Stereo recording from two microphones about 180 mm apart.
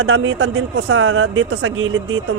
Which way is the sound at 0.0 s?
90° right.